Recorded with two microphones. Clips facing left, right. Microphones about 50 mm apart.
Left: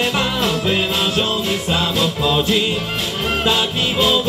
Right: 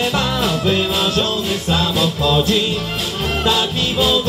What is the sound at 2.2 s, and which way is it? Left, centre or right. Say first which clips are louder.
Music: right 1 dB; centre.